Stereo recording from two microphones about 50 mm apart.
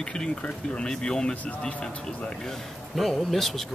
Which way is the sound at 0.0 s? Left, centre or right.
Centre.